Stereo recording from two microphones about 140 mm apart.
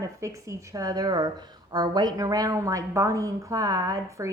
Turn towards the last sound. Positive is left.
turn(degrees=-20)  # may be behind; listen again after turning